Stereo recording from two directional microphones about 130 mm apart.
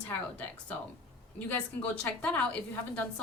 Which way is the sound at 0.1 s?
10° left (ahead or behind).